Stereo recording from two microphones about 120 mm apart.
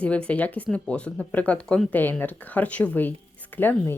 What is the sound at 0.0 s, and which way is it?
Speech, 10° left (ahead or behind).